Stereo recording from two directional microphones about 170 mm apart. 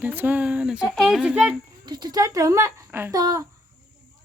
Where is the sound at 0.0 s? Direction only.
10° right (ahead or behind).